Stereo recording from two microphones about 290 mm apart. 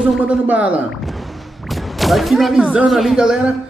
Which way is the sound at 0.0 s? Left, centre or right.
Centre.